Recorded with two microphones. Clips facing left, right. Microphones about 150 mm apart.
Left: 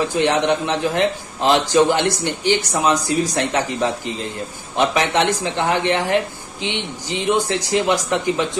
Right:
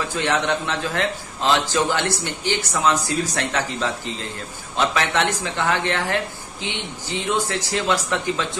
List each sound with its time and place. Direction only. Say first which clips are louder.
0.0 s a man's voice: left 5 dB; 15° left (ahead or behind)